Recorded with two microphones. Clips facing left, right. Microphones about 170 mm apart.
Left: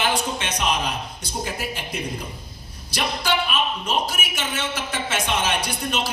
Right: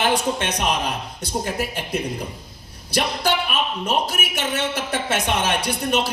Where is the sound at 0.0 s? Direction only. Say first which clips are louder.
Right 3 dB; 55° right (ahead or behind).